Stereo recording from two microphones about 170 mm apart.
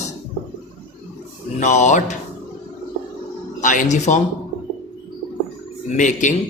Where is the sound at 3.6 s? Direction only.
50° left (ahead or behind).